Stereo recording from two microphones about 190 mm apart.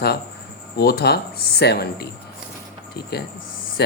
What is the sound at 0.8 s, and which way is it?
Speech, 55° left (ahead or behind).